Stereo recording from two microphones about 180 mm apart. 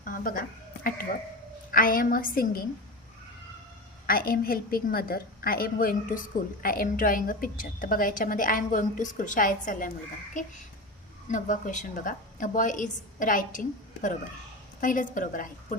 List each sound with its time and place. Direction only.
0.0 s a woman's voice: 50° left (ahead or behind)
1.7 s a woman's voice: 50° left (ahead or behind)
4.0 s a woman's voice: 55° left (ahead or behind)